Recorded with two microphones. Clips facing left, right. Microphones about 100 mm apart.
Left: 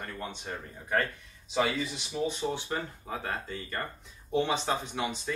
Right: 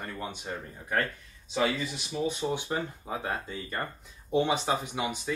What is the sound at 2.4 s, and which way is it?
Speech, 15° right (ahead or behind).